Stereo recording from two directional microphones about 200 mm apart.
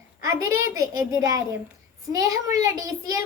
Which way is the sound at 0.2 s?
15° right (ahead or behind).